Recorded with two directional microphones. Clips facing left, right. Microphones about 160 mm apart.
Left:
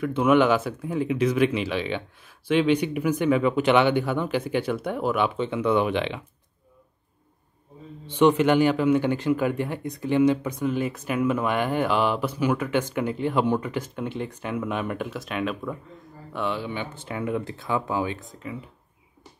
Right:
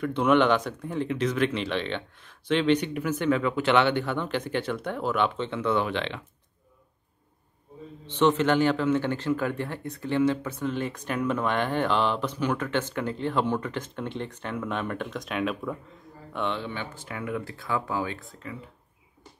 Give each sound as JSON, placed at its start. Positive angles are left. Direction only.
{"t": 0.0, "sound": "speech", "side_deg": 5}
{"t": 8.1, "sound": "speech", "side_deg": 10}
{"t": 16.9, "sound": "speech", "side_deg": 25}